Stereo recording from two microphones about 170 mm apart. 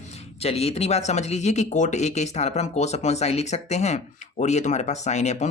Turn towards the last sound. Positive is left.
turn(degrees=40)  # may be behind; listen again after turning